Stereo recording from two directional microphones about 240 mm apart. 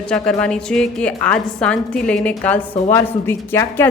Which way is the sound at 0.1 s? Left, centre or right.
Centre.